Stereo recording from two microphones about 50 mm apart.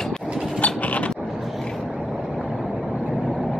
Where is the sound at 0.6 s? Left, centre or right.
Left.